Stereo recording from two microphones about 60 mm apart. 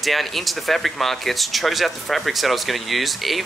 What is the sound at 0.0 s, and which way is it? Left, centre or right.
Speech, centre.